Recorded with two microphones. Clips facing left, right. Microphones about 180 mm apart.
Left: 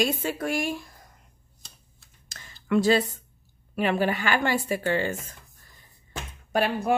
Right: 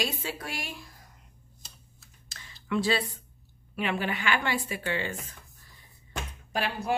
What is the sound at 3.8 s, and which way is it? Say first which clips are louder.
Speech: left 6 dB; 40° left (ahead or behind).